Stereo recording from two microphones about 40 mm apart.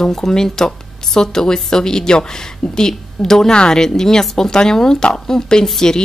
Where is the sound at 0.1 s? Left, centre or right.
Centre.